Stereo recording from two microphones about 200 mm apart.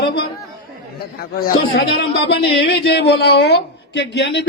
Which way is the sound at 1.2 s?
50° left (ahead or behind).